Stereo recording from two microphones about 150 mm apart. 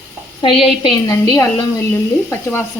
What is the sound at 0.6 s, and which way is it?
Speech, 30° left (ahead or behind).